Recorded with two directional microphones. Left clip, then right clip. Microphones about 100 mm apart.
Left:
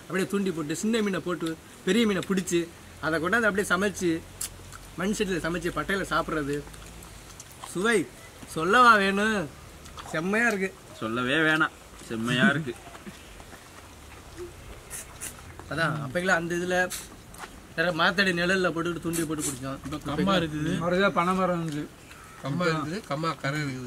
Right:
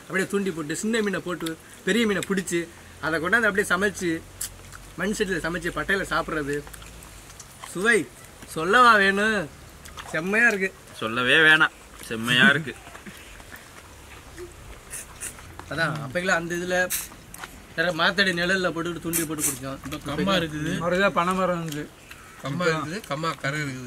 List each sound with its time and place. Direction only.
0.1 s speech: centre (ahead or behind)
7.6 s speech: centre (ahead or behind)
11.0 s speech: 40° right (ahead or behind)
15.7 s speech: 5° left (ahead or behind)
20.8 s speech: 15° right (ahead or behind)